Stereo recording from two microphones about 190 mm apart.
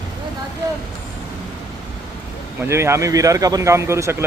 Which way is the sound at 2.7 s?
15° right (ahead or behind).